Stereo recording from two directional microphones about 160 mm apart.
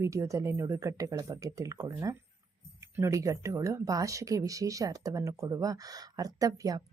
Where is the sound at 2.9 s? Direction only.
20° right (ahead or behind).